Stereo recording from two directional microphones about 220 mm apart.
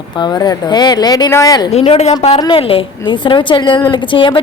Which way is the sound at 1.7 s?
30° left (ahead or behind).